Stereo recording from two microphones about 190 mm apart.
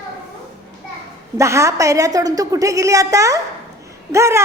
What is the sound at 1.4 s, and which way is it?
Speech, 15° right (ahead or behind).